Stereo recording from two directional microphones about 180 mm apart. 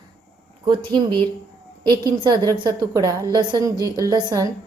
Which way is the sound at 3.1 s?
15° left (ahead or behind).